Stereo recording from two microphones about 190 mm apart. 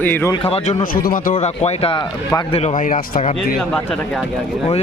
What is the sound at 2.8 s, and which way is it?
Speech, 45° left (ahead or behind).